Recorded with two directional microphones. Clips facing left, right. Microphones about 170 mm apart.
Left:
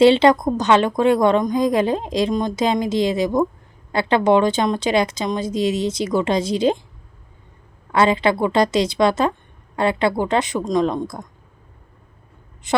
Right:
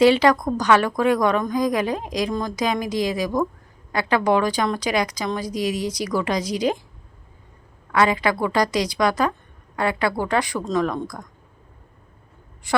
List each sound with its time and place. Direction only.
0.0 s a woman's voice: 25° left (ahead or behind)
7.9 s a woman's voice: 25° left (ahead or behind)
12.7 s a woman's voice: 20° left (ahead or behind)